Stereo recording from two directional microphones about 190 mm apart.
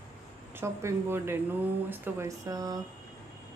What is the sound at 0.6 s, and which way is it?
A woman's voice, 15° right (ahead or behind).